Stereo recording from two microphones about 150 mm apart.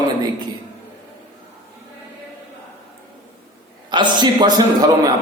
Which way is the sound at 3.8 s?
30° right (ahead or behind).